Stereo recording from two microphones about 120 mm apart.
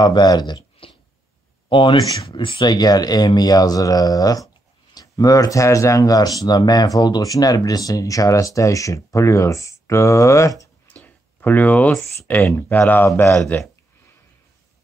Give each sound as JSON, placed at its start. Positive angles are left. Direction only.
{"t": 0.0, "sound": "speech", "side_deg": 35}
{"t": 10.9, "sound": "a sound", "side_deg": 15}
{"t": 12.3, "sound": "speech", "side_deg": 20}